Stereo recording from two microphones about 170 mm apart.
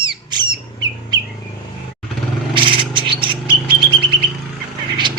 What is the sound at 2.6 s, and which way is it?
Bird, 30° right (ahead or behind).